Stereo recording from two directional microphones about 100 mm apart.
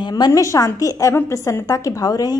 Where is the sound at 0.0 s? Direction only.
40° left (ahead or behind).